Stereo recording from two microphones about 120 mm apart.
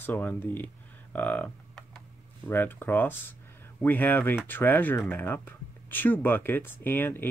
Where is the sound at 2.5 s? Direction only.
15° left (ahead or behind).